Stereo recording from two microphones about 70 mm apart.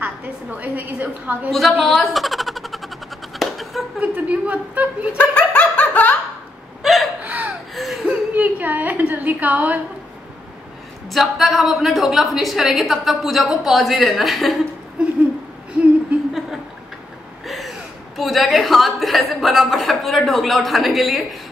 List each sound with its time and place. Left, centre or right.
0.0 s a woman's voice: right
1.5 s a woman's voice: centre
3.3 s a sound: centre
4.0 s a woman's voice: right
5.1 s dog: left
6.8 s gasp: centre
7.2 s a sound: centre
7.4 s a sound: centre
8.4 s a woman's voice: right
11.1 s a woman's voice: centre
15.0 s a sound: centre
17.5 s chuckle: centre